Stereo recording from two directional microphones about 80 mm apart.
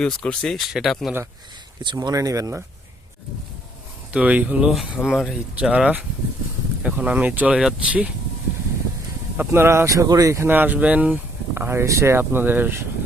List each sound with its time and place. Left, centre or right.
0.0 s speech: centre
1.8 s speech: right
2.1 s speech: right
4.1 s speech: centre
5.0 s speech: centre
5.5 s speech: centre
9.4 s speech: right
10.4 s speech: right